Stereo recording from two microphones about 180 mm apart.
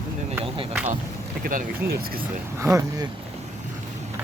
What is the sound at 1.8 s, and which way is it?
Speech, 55° right (ahead or behind).